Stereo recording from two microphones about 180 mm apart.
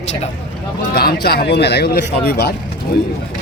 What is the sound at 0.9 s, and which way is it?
Speech, 60° left (ahead or behind).